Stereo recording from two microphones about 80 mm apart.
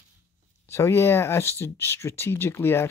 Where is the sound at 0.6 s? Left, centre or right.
Left.